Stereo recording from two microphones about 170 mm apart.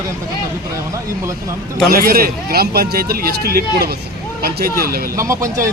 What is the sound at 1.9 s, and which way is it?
Speech, 60° right (ahead or behind).